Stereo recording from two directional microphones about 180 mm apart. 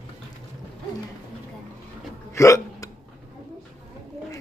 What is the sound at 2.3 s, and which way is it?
Hiccup, 15° left (ahead or behind).